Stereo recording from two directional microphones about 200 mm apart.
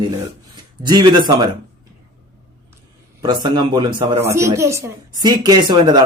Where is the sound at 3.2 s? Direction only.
20° right (ahead or behind).